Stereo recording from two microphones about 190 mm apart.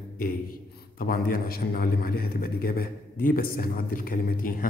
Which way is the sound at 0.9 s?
50° left (ahead or behind).